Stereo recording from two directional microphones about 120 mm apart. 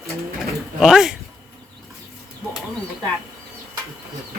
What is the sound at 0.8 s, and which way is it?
Speech, 5° right (ahead or behind).